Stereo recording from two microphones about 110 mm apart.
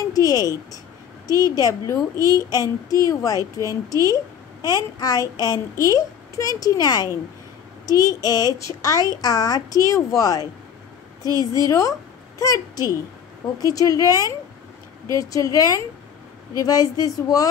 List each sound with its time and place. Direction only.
0.1 s a child's voice: 35° left (ahead or behind)
11.3 s a woman's voice: 35° right (ahead or behind)
12.4 s a child's voice: 30° left (ahead or behind)